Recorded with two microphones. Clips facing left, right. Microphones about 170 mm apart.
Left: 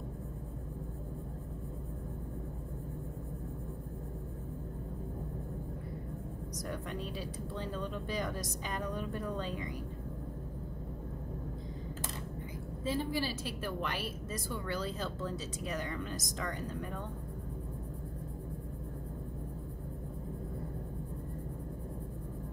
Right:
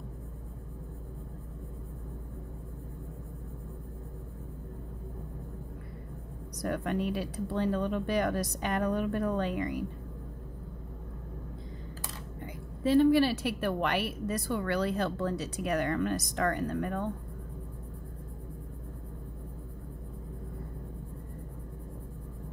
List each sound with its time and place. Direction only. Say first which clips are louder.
6.6 s a woman's voice: right 10 dB; 65° right (ahead or behind)
12.8 s a woman's voice: right 12 dB; 70° right (ahead or behind)